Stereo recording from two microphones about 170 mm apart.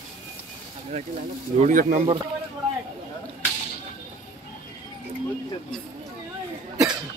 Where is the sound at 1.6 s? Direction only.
50° right (ahead or behind).